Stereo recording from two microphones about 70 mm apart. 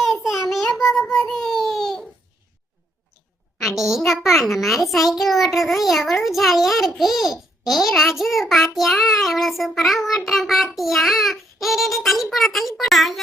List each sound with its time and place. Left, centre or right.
0.2 s child singing: left
0.5 s child singing: centre
3.6 s a child's voice: centre